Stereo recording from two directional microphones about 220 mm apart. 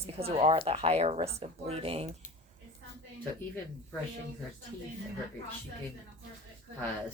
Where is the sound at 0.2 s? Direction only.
25° right (ahead or behind).